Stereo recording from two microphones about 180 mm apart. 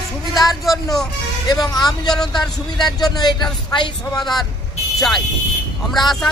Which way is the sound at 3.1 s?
25° left (ahead or behind).